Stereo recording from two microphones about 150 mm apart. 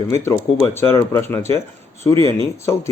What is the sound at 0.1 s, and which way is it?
Speech, 15° left (ahead or behind).